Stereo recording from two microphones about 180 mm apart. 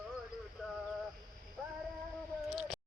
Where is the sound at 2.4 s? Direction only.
Centre (ahead or behind).